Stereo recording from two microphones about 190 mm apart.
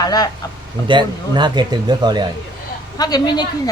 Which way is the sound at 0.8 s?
25° right (ahead or behind).